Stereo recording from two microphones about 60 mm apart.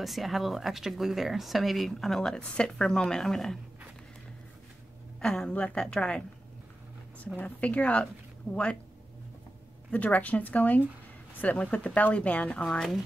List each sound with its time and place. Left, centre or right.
0.0 s speech: centre
5.2 s a woman's voice: centre
7.3 s speech: left
9.8 s speech: left
12.6 s a woman's voice: centre